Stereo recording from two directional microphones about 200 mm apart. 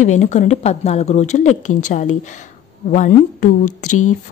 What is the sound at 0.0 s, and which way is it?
Speech, 35° left (ahead or behind).